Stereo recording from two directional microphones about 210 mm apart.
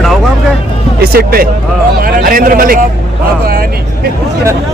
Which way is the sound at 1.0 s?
45° right (ahead or behind).